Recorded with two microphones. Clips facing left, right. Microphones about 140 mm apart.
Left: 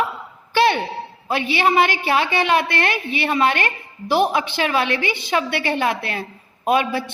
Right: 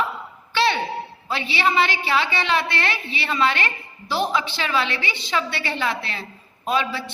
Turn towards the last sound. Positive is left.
turn(degrees=50)  # may be behind; listen again after turning